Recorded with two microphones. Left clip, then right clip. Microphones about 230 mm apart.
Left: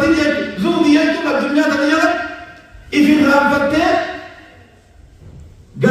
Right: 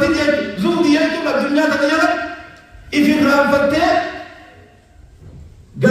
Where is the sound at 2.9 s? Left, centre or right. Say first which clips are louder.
Left 2 dB; right.